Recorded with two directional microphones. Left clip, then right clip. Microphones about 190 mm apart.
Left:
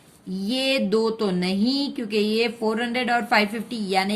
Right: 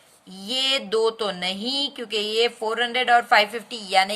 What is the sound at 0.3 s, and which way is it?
A woman's voice, 30° right (ahead or behind).